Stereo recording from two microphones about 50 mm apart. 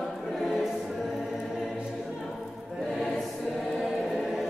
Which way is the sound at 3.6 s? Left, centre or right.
Centre.